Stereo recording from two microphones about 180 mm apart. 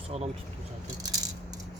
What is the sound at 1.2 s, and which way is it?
Rattle, 20° right (ahead or behind).